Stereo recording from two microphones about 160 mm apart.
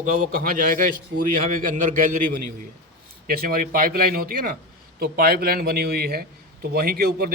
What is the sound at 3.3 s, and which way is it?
A man's voice, 65° right (ahead or behind).